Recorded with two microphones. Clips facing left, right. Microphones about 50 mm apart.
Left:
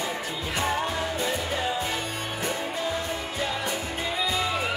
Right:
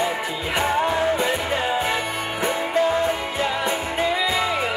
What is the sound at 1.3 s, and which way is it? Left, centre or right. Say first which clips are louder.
Music: right 5 dB; right.